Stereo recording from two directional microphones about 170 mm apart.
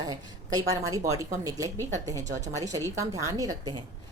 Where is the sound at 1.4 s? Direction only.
20° right (ahead or behind).